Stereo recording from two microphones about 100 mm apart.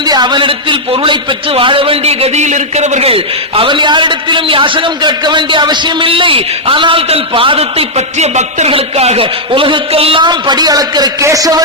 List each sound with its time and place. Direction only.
0.0 s a man's voice: 45° right (ahead or behind); by 10.2 s 70° right (ahead or behind)
10.2 s a man's voice: 45° right (ahead or behind)